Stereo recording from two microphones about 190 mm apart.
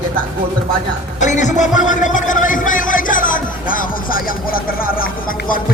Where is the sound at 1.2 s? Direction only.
40° left (ahead or behind).